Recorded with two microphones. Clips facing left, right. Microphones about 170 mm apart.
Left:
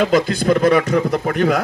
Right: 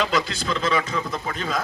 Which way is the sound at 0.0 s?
50° left (ahead or behind).